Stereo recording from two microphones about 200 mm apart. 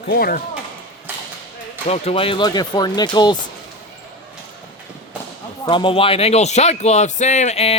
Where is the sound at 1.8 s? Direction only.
30° left (ahead or behind).